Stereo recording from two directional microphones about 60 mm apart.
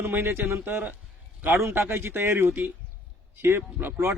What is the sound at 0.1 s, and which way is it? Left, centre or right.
A man's voice, right.